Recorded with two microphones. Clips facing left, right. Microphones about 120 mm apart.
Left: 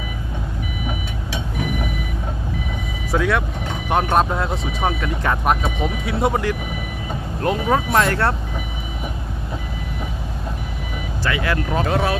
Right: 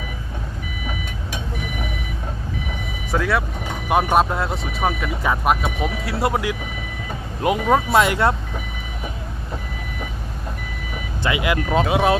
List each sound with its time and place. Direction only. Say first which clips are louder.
3.1 s speech: left 1 dB; centre (ahead or behind)
11.2 s speech: right 1 dB; 15° right (ahead or behind)